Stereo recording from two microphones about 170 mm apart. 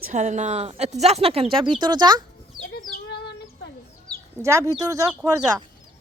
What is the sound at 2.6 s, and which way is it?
Chicken, 75° left (ahead or behind).